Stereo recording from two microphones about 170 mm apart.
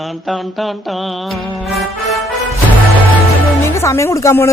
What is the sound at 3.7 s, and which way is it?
Speech, 15° left (ahead or behind).